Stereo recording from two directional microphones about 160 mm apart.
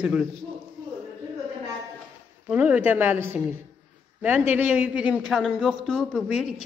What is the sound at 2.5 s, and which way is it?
A woman's voice, 10° right (ahead or behind).